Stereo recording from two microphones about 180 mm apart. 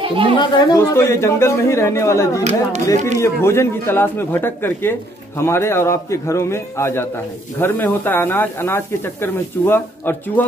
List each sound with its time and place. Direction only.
0.0 s speech: 30° right (ahead or behind)
0.4 s speech: 20° left (ahead or behind)